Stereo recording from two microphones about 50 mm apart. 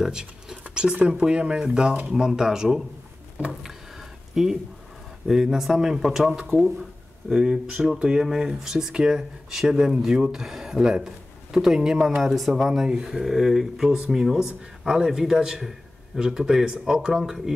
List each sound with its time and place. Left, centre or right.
0.0 s speech: centre
4.4 s speech: centre
13.9 s speech: centre